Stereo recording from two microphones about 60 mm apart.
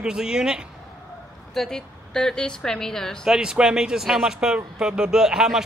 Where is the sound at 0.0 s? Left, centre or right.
Centre.